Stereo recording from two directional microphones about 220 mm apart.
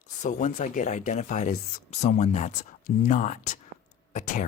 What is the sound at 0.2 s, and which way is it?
Speech, 35° left (ahead or behind).